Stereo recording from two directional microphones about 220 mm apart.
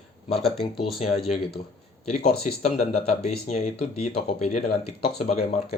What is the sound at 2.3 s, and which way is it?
Speech, 30° left (ahead or behind).